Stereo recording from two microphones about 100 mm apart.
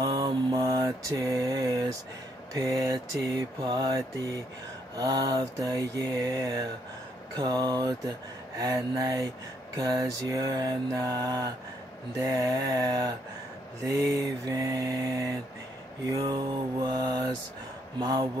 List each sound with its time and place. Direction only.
0.0 s mantra: 50° right (ahead or behind)
0.8 s mantra: 35° right (ahead or behind)
3.6 s mantra: 45° right (ahead or behind)
16.2 s mantra: 50° right (ahead or behind)